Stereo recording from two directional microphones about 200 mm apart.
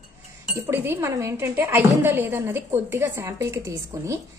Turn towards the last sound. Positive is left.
turn(degrees=-15)  # may be behind; listen again after turning